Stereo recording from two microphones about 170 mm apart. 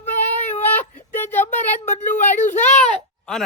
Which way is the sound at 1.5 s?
45° left (ahead or behind).